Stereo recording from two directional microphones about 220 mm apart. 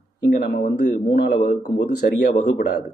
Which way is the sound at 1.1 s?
40° left (ahead or behind).